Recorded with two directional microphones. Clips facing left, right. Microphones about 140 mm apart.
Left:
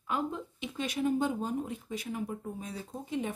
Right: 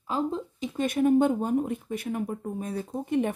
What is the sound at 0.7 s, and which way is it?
Speech, 55° right (ahead or behind).